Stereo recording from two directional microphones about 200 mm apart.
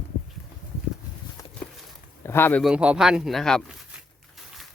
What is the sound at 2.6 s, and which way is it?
Speech, 5° right (ahead or behind).